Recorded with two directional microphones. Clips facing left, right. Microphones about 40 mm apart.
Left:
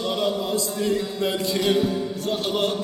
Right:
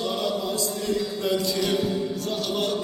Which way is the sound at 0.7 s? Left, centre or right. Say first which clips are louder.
Left 3 dB; left.